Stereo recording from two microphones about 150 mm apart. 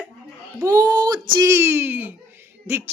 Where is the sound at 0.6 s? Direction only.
25° right (ahead or behind).